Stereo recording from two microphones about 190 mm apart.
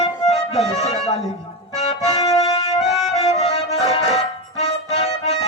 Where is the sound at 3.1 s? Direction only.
35° left (ahead or behind).